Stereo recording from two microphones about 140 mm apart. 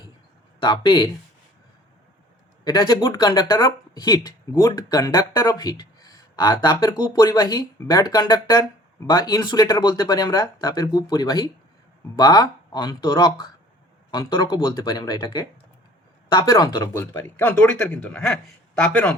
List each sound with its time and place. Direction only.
0.6 s speech: 35° left (ahead or behind)
2.6 s speech: 35° left (ahead or behind)
14.3 s speech: 30° left (ahead or behind)
16.5 s speech: 25° left (ahead or behind)
16.9 s speech: 15° left (ahead or behind)